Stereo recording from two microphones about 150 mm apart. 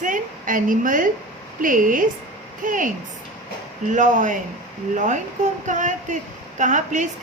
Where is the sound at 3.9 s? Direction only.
55° right (ahead or behind).